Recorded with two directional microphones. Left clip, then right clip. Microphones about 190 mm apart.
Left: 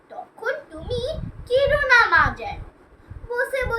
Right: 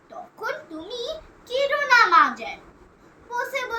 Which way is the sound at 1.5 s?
20° left (ahead or behind).